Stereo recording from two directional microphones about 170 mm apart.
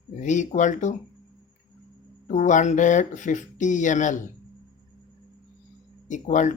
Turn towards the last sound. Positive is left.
turn(degrees=45)  # may be behind; listen again after turning